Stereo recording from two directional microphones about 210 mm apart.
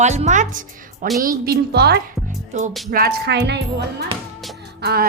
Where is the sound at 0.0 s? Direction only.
35° right (ahead or behind).